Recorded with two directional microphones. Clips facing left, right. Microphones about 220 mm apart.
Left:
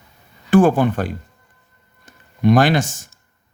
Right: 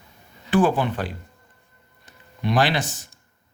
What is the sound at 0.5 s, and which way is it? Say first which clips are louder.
A man's voice: left 6 dB; 45° left (ahead or behind).